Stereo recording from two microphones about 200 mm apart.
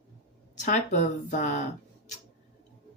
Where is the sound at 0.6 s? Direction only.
40° left (ahead or behind).